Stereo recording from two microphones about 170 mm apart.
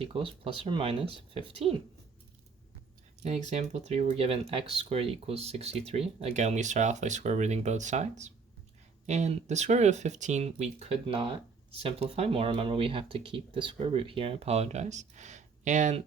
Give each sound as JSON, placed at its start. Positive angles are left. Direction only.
{"t": 0.0, "sound": "speech", "side_deg": -30}
{"t": 3.5, "sound": "speech", "side_deg": -45}
{"t": 9.0, "sound": "speech", "side_deg": -40}